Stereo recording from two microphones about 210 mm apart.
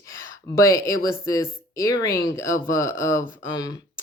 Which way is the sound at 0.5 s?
15° left (ahead or behind).